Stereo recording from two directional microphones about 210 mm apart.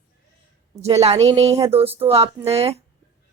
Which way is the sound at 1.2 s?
30° right (ahead or behind).